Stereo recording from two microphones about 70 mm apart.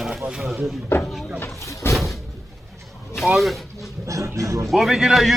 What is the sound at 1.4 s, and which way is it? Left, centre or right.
Speech, left.